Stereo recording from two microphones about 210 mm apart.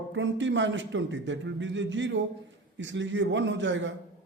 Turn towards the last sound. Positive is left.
turn(degrees=-60)  # may be behind; listen again after turning